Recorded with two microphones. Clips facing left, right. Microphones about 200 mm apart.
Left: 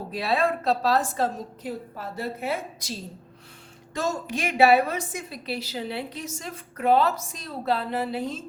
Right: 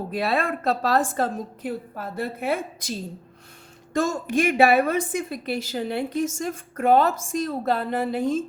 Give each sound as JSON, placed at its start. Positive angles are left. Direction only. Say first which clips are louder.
{"t": 0.1, "sound": "a woman's voice", "louder": "left 1 dB", "side_deg": -55}
{"t": 3.9, "sound": "a woman's voice", "louder": "right 6 dB", "side_deg": -50}